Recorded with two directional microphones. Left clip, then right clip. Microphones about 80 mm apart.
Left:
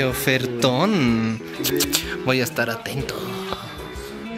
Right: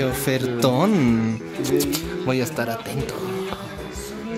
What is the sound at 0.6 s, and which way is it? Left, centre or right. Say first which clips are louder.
Speech: right 1 dB; right.